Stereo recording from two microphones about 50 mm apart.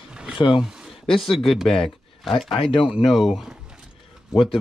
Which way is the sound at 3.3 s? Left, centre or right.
Centre.